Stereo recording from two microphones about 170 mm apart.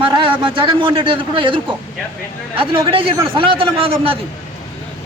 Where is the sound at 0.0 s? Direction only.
30° right (ahead or behind).